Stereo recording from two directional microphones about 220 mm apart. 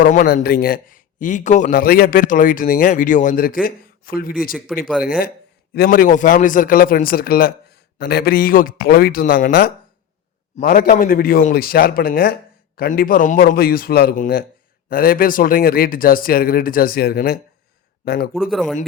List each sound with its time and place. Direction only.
0.0 s a man's voice: 40° left (ahead or behind)
4.7 s speech: centre (ahead or behind)
5.0 s a man's voice: 40° left (ahead or behind)
18.3 s speech: centre (ahead or behind)